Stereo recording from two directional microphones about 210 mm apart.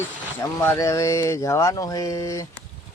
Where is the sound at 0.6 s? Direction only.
10° left (ahead or behind).